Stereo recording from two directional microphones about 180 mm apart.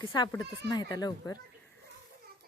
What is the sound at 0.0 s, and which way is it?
Speech, 20° left (ahead or behind).